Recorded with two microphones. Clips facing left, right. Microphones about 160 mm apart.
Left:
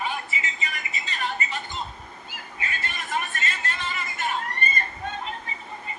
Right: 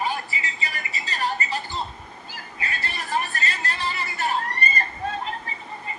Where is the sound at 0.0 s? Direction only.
35° right (ahead or behind).